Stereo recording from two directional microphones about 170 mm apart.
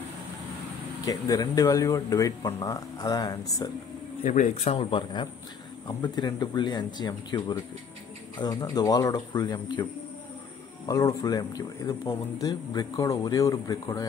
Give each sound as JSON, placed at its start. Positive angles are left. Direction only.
{"t": 1.0, "sound": "speech", "side_deg": 20}
{"t": 4.2, "sound": "speech", "side_deg": 45}
{"t": 4.7, "sound": "speech", "side_deg": 25}
{"t": 10.9, "sound": "speech", "side_deg": 20}